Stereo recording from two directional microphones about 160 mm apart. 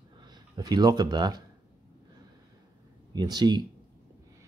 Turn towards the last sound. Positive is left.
turn(degrees=-25)  # may be behind; listen again after turning